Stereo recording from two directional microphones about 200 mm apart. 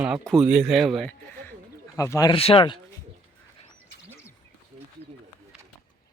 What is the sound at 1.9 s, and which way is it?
Speech, 15° left (ahead or behind).